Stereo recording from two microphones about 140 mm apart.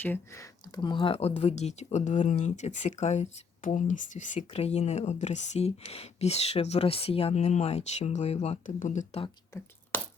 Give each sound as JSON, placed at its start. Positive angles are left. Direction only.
{"t": 0.0, "sound": "speech", "side_deg": 15}
{"t": 0.8, "sound": "speech", "side_deg": 35}
{"t": 4.4, "sound": "speech", "side_deg": 50}